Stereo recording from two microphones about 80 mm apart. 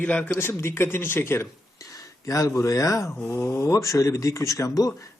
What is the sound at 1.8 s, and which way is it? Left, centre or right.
Speech, left.